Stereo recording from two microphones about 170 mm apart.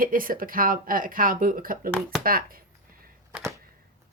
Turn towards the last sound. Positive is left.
turn(degrees=-5)  # may be behind; listen again after turning